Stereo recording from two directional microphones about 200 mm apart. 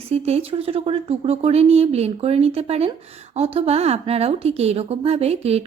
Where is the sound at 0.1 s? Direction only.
30° right (ahead or behind).